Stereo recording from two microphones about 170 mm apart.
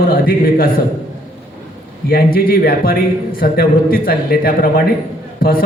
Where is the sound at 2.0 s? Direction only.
60° left (ahead or behind).